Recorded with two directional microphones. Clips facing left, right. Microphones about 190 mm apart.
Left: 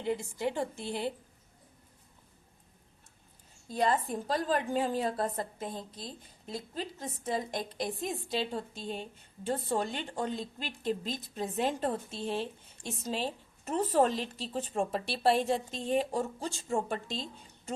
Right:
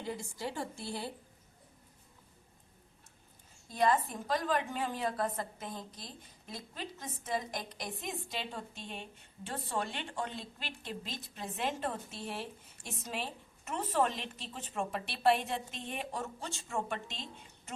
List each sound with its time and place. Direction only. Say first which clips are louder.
0.0 s a woman's voice: left 7 dB; 20° left (ahead or behind)
3.8 s a woman's voice: left 1 dB; 30° left (ahead or behind)
12.1 s a woman's voice: left 7 dB; 25° left (ahead or behind)